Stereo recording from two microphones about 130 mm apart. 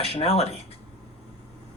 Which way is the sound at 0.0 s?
50° left (ahead or behind).